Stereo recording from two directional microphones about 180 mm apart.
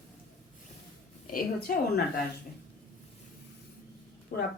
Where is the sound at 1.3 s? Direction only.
55° left (ahead or behind).